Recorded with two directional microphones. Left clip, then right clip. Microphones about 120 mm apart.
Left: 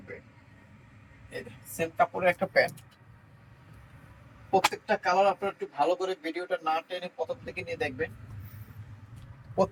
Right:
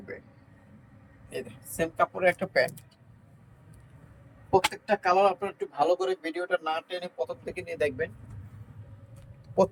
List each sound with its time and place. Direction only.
1.8 s speech: 10° right (ahead or behind)
4.7 s speech: 30° right (ahead or behind)